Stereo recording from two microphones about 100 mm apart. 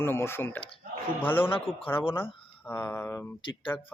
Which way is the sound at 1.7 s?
5° right (ahead or behind).